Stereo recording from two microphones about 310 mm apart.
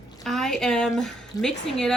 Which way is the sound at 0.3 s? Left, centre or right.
Centre.